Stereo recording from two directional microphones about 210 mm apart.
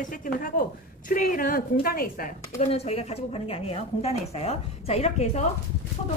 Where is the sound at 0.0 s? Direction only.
40° left (ahead or behind).